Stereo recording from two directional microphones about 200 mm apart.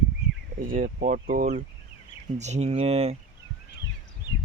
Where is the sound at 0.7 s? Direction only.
45° right (ahead or behind).